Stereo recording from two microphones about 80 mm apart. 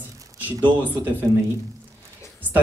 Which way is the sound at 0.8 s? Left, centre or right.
Right.